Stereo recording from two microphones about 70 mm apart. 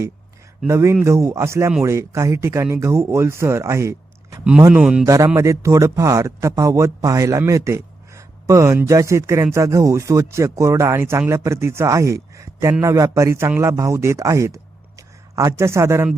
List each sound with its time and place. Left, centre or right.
0.7 s a man's voice: right
4.7 s a man's voice: centre
5.0 s a man's voice: right